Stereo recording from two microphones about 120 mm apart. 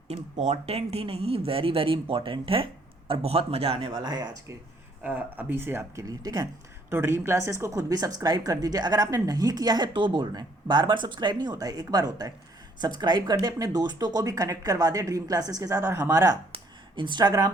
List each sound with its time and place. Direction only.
0.1 s speech: 65° right (ahead or behind); by 4.3 s 35° right (ahead or behind)
5.0 s speech: 15° right (ahead or behind); by 6.5 s 30° right (ahead or behind)
6.9 s speech: 20° right (ahead or behind)
16.9 s speech: 40° right (ahead or behind)